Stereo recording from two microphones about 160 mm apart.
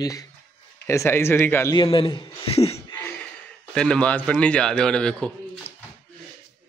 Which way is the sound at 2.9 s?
15° left (ahead or behind).